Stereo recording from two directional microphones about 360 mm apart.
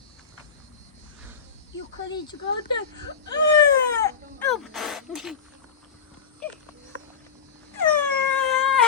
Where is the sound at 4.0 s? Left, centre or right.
Centre.